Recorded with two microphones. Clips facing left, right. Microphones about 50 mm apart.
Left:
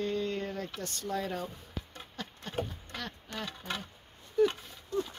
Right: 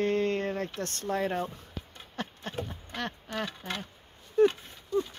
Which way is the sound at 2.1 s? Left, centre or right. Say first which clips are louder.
Right 2 dB; right.